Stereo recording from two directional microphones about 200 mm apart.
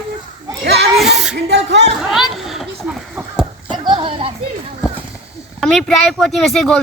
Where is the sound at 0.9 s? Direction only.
Centre (ahead or behind).